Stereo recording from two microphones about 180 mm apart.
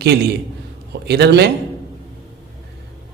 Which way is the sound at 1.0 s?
65° right (ahead or behind).